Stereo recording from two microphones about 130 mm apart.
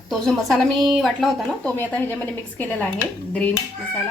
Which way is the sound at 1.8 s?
15° left (ahead or behind).